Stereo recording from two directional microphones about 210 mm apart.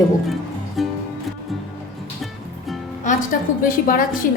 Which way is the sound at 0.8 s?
Centre (ahead or behind).